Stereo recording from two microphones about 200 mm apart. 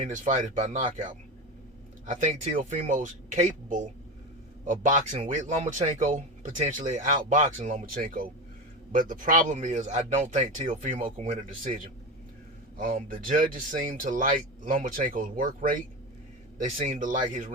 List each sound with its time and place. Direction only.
0.0 s speech: 40° right (ahead or behind)
2.0 s speech: 35° right (ahead or behind)
4.6 s speech: 40° right (ahead or behind)